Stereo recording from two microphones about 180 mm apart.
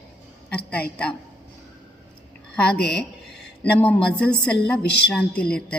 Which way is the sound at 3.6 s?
10° left (ahead or behind).